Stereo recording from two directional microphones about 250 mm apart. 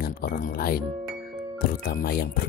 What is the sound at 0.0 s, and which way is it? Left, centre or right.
Speech, left.